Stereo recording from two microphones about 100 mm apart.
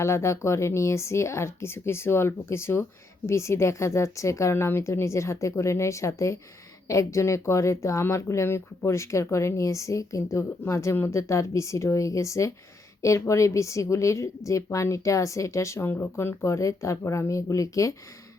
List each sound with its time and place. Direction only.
0.0 s a woman's voice: 30° left (ahead or behind)